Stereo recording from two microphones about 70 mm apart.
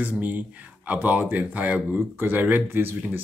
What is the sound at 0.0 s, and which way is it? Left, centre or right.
Speech, right.